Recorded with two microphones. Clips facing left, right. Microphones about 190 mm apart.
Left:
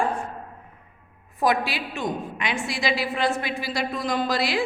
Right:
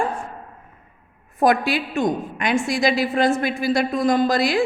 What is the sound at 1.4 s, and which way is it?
A woman's voice, 50° right (ahead or behind).